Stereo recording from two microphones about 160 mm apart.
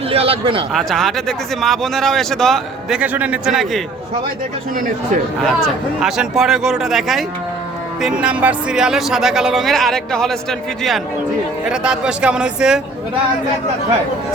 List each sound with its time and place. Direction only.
0.1 s speech: 35° right (ahead or behind)
0.7 s speech: centre (ahead or behind)
3.0 s a man's voice: 10° right (ahead or behind)
5.4 s speech: 5° left (ahead or behind)
11.7 s speech: 5° right (ahead or behind)